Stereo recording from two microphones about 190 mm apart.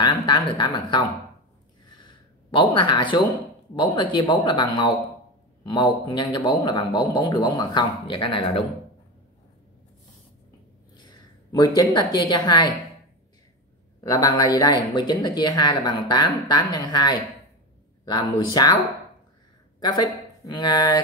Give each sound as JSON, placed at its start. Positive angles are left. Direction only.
{"t": 0.0, "sound": "speech", "side_deg": 25}
{"t": 2.0, "sound": "a sound", "side_deg": 25}
{"t": 3.7, "sound": "speech", "side_deg": 25}
{"t": 11.0, "sound": "speech", "side_deg": 20}
{"t": 14.0, "sound": "speech", "side_deg": 15}
{"t": 19.8, "sound": "speech", "side_deg": 20}